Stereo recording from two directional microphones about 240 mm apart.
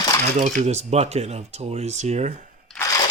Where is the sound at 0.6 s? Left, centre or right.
Right.